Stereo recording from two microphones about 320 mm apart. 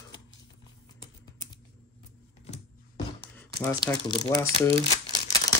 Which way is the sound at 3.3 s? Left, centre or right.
Centre.